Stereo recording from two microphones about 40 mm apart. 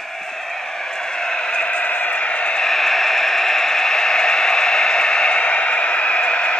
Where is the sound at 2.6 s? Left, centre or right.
Centre.